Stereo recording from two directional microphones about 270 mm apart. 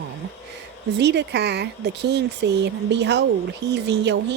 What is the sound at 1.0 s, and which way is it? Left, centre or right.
A woman's voice, right.